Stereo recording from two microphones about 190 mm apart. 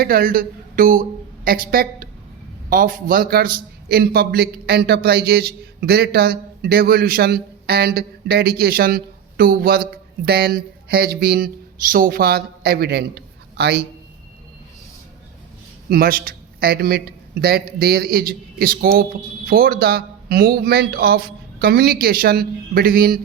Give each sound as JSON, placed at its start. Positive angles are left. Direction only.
{"t": 0.0, "sound": "a man's voice", "side_deg": -50}
{"t": 15.9, "sound": "a man's voice", "side_deg": -50}